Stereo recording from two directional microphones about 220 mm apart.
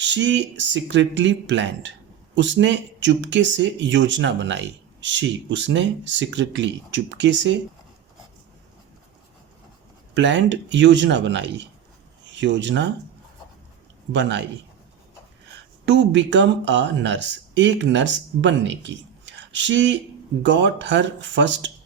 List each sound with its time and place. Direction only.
0.0 s speech: 55° right (ahead or behind)
10.2 s speech: 55° right (ahead or behind)
14.1 s speech: 55° right (ahead or behind)
15.9 s speech: 55° right (ahead or behind)